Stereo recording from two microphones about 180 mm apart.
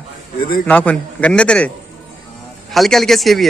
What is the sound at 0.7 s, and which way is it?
A man's voice, 10° left (ahead or behind).